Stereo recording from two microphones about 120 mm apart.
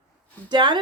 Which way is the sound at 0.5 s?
40° right (ahead or behind).